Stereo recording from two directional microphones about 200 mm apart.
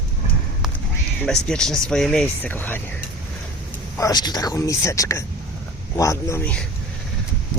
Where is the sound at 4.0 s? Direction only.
20° left (ahead or behind).